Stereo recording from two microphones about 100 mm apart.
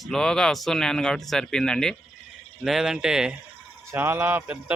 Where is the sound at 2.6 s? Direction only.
5° right (ahead or behind).